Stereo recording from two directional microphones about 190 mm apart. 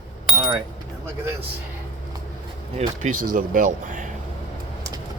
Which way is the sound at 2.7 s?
40° right (ahead or behind).